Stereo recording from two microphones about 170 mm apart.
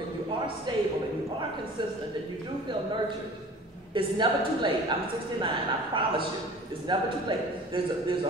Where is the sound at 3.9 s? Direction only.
30° right (ahead or behind).